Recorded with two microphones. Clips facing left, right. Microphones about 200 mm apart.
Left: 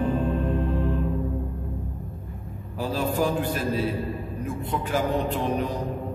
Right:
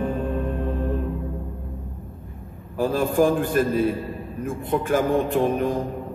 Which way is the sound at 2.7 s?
50° right (ahead or behind).